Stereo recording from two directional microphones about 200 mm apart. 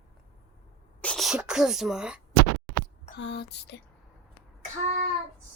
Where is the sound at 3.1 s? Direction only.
55° left (ahead or behind).